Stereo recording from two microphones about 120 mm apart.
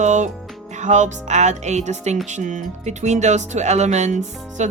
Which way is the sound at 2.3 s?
85° right.